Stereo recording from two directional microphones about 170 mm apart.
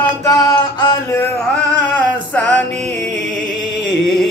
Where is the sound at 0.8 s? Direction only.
20° left (ahead or behind).